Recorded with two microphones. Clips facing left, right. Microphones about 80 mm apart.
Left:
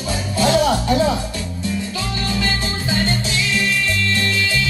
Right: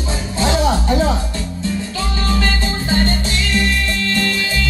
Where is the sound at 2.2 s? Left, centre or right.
Right.